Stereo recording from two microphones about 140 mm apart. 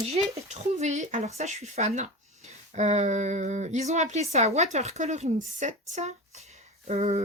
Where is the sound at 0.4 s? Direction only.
55° right (ahead or behind).